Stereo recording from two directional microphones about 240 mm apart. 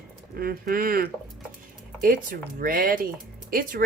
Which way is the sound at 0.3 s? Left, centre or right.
Right.